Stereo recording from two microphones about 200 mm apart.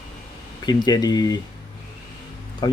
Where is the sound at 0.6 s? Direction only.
20° left (ahead or behind).